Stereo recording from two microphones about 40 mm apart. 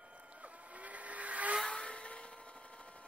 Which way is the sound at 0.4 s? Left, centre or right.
Right.